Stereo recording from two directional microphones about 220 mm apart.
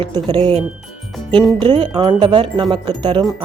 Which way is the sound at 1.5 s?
20° right (ahead or behind).